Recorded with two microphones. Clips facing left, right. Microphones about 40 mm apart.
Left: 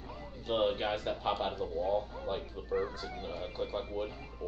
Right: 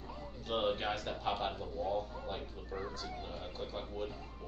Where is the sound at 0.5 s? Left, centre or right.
Centre.